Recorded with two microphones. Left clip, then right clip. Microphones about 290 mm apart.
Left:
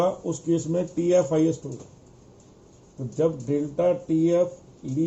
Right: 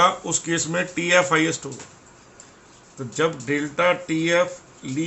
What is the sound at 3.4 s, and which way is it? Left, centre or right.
Speech, right.